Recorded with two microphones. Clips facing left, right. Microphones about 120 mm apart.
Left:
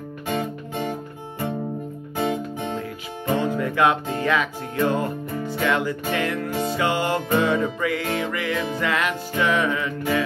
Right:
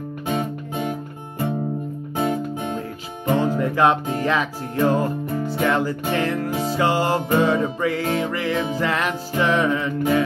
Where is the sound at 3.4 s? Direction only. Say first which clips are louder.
Right 2 dB; 35° right (ahead or behind).